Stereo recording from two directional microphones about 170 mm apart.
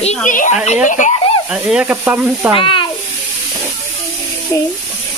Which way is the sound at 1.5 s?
5° right (ahead or behind).